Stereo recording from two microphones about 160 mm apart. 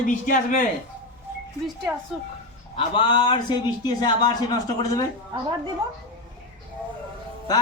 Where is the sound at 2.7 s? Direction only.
30° left (ahead or behind).